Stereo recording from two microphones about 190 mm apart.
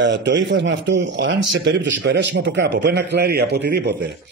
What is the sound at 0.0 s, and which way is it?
A man's voice, 70° right (ahead or behind).